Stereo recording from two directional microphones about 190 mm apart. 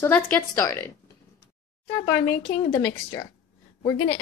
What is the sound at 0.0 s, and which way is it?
Speech, 10° left (ahead or behind).